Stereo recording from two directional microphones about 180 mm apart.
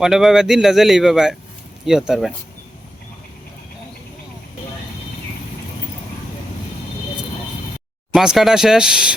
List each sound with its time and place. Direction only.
0.0 s speech: centre (ahead or behind)
8.1 s speech: 5° right (ahead or behind)